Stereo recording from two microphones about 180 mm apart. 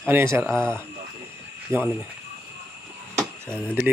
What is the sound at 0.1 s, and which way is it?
Speech, 15° right (ahead or behind).